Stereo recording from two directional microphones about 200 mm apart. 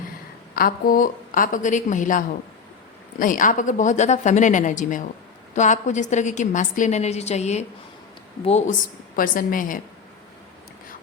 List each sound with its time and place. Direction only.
0.5 s a woman's voice: 45° left (ahead or behind)
9.1 s a woman's voice: 45° left (ahead or behind)